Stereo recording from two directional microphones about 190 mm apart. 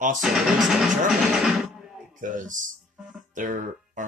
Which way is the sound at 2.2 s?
45° right (ahead or behind).